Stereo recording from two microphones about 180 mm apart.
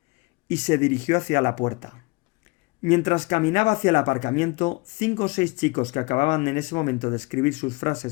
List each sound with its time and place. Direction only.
0.5 s speech: 40° left (ahead or behind)